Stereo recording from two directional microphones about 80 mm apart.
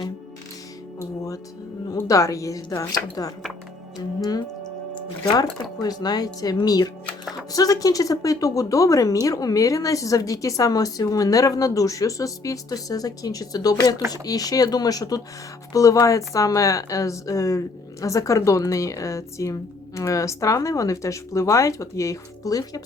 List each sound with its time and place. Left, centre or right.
0.9 s a woman's voice: left
5.8 s a woman's voice: left